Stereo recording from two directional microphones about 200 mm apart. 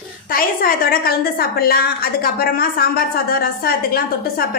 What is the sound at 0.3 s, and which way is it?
A woman's voice, 45° left (ahead or behind).